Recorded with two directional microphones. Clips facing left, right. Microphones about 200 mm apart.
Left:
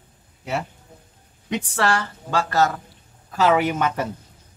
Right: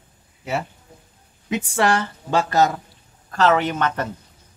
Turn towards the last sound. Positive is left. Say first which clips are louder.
# left 1 dB
turn(degrees=10)  # may be behind; listen again after turning